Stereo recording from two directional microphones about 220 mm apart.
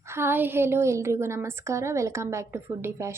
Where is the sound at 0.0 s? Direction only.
10° right (ahead or behind).